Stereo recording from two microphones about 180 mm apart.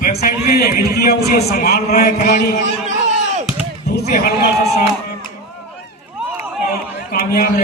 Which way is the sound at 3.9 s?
60° left (ahead or behind).